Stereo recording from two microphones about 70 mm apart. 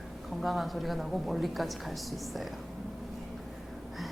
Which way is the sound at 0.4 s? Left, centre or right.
Centre.